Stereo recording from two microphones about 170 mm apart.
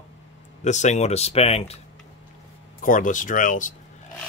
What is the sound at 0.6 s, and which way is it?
Speech, 45° left (ahead or behind).